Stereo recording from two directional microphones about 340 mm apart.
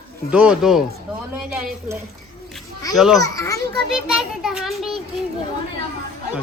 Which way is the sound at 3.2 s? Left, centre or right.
Centre.